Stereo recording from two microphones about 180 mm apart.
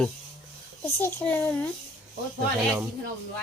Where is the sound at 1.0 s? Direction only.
10° left (ahead or behind).